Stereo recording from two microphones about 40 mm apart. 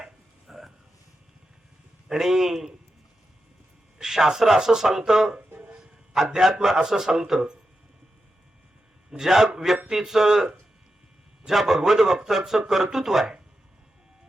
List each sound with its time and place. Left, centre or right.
0.0 s a sound: centre
2.0 s a man's voice: centre
3.9 s speech: centre
5.8 s a sound: centre
6.7 s speech: centre
9.1 s speech: centre
11.4 s speech: centre